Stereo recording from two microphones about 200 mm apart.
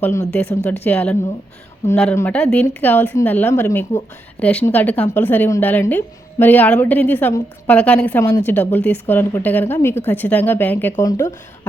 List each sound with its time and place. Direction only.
0.0 s speech: 10° left (ahead or behind)